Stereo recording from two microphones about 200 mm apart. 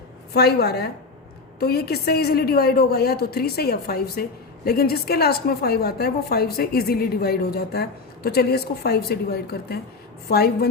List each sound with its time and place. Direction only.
0.3 s a woman's voice: 55° left (ahead or behind)